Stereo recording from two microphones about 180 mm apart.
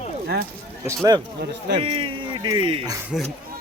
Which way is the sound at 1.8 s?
30° right (ahead or behind).